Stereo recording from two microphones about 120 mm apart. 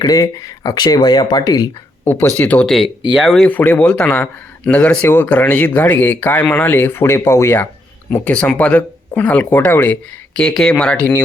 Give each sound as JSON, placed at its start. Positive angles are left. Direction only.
{"t": 0.0, "sound": "speech", "side_deg": 30}
{"t": 2.0, "sound": "speech", "side_deg": 15}
{"t": 2.7, "sound": "speech", "side_deg": -5}
{"t": 3.4, "sound": "speech", "side_deg": 10}